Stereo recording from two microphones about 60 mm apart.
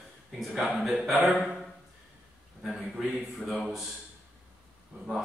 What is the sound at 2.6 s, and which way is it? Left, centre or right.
A man's voice, centre.